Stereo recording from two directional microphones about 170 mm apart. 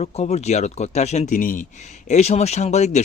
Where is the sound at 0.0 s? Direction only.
40° left (ahead or behind).